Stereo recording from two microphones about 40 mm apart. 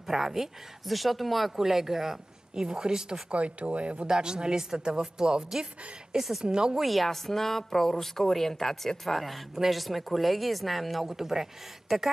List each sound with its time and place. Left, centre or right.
0.0 s speech: centre
3.3 s speech: right
4.1 s speech: centre
6.1 s speech: centre
6.4 s speech: centre
6.8 s a woman's voice: centre